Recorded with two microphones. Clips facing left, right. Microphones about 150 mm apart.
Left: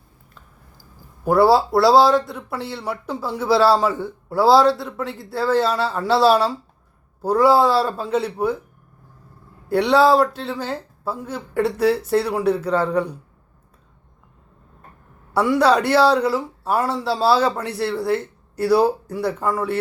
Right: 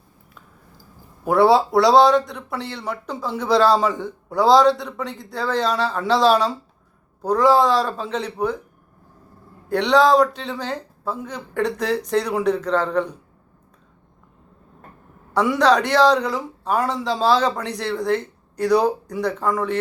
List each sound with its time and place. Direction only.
1.2 s a man's voice: centre (ahead or behind)
9.6 s speech: 10° left (ahead or behind)
15.3 s speech: 5° left (ahead or behind)